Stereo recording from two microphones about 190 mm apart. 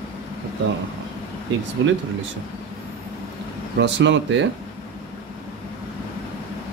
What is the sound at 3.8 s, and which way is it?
Speech, 70° right (ahead or behind).